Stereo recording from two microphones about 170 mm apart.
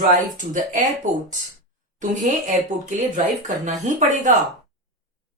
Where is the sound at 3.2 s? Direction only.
45° right (ahead or behind).